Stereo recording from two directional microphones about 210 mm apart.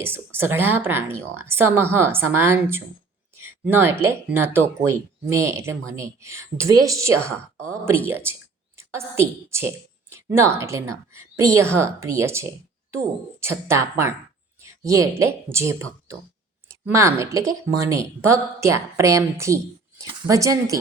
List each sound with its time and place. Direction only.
0.0 s a woman's voice: 10° right (ahead or behind)
14.6 s a sound: 15° right (ahead or behind)
15.2 s a woman's voice: 15° right (ahead or behind)